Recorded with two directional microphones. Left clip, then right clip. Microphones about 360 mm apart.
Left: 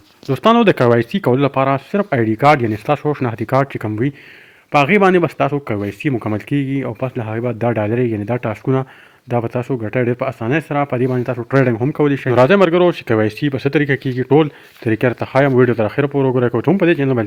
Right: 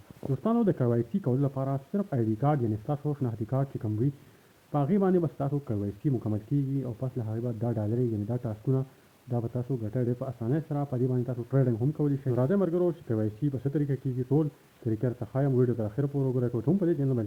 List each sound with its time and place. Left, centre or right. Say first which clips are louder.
0.3 s speech: left 16 dB; left